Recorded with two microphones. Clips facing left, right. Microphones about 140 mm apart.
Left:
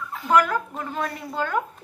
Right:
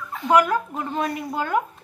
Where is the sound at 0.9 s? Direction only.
15° right (ahead or behind).